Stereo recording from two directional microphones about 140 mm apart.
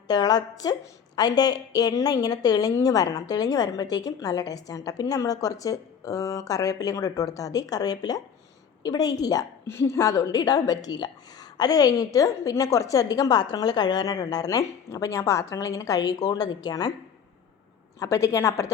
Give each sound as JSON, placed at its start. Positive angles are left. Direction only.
{"t": 0.1, "sound": "a woman's voice", "side_deg": 30}
{"t": 18.0, "sound": "a woman's voice", "side_deg": 20}